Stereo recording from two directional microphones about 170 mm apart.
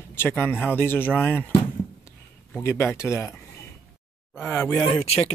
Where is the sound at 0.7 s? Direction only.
10° left (ahead or behind).